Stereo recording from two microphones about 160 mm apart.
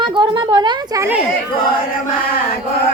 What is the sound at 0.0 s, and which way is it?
A woman's voice, 30° right (ahead or behind).